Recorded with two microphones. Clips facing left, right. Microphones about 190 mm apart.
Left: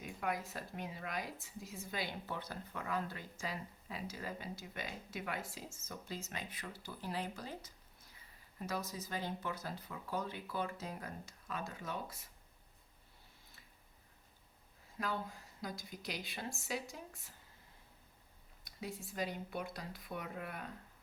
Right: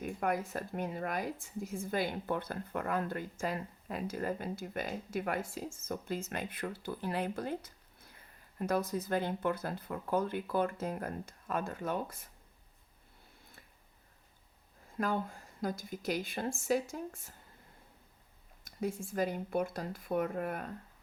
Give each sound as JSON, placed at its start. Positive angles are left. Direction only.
{"t": 0.0, "sound": "a woman's voice", "side_deg": -50}
{"t": 14.9, "sound": "a woman's voice", "side_deg": -50}
{"t": 18.6, "sound": "a woman's voice", "side_deg": -50}